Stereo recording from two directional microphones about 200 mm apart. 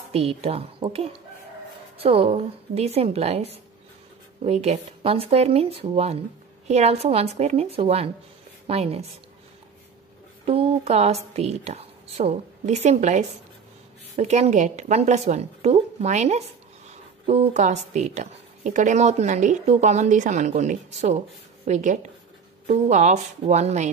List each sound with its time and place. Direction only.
0.1 s a woman's voice: 30° right (ahead or behind)
10.4 s a woman's voice: 30° right (ahead or behind)